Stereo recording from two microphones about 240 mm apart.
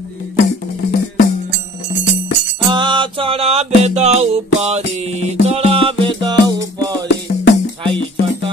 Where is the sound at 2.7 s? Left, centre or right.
Centre.